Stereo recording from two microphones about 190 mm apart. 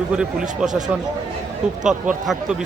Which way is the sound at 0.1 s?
5° right (ahead or behind).